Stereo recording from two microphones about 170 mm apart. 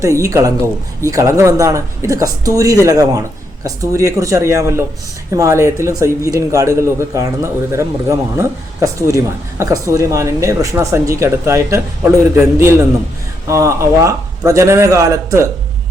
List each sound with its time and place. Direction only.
0.2 s speech: 20° right (ahead or behind)